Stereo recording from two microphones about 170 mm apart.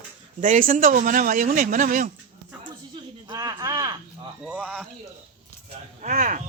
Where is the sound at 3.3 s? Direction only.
25° right (ahead or behind).